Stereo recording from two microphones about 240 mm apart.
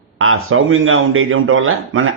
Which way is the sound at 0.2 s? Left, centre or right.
Right.